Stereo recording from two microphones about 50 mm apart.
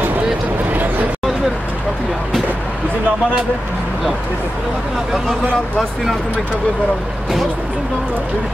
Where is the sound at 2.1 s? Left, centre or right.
Centre.